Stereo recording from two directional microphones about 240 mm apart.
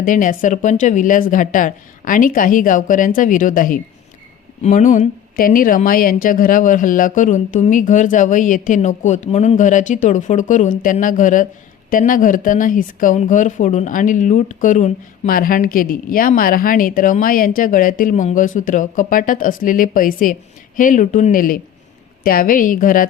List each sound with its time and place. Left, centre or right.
0.0 s speech: left